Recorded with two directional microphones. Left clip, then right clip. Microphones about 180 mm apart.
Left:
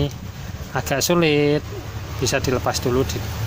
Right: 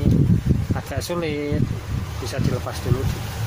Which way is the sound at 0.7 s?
60° left (ahead or behind).